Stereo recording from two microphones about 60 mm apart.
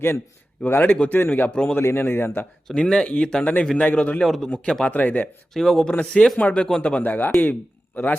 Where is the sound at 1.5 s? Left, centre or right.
Centre.